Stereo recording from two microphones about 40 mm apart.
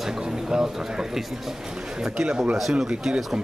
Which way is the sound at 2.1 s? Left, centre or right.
Centre.